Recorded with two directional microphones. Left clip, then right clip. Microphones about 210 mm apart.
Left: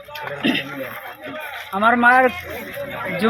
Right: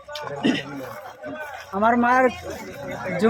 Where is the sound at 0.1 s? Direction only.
15° right (ahead or behind).